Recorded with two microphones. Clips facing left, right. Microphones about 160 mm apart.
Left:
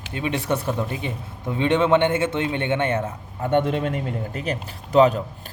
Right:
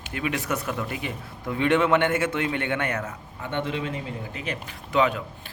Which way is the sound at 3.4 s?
50° left (ahead or behind).